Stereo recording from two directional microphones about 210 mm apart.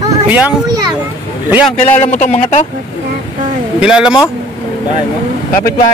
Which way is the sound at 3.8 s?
5° right (ahead or behind).